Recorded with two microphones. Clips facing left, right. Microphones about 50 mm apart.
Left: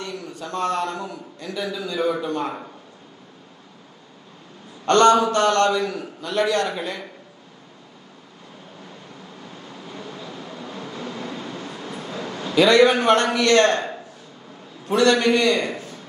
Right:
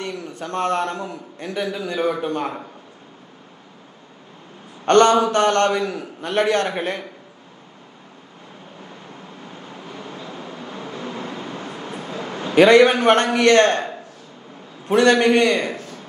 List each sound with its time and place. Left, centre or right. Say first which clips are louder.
0.0 s a man's voice: right 3 dB; right
4.8 s a man's voice: right 1 dB; right
9.5 s vehicle: right 2 dB; right
12.5 s a man's voice: right 3 dB; right